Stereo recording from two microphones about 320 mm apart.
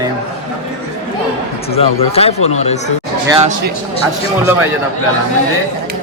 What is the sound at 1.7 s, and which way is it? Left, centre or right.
Speech, centre.